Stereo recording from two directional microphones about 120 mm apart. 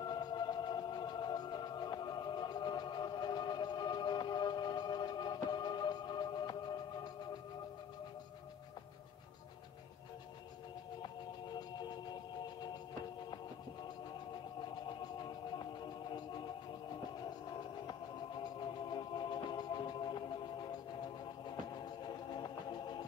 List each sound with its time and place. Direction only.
0.0 s music: 35° left (ahead or behind)
11.5 s music: 40° left (ahead or behind)
14.8 s music: 35° left (ahead or behind)
18.4 s music: 40° left (ahead or behind)